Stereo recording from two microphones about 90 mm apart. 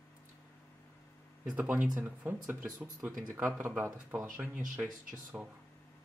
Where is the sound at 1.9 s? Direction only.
25° right (ahead or behind).